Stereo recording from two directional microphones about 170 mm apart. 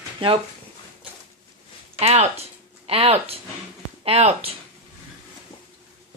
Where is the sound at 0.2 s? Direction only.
30° right (ahead or behind).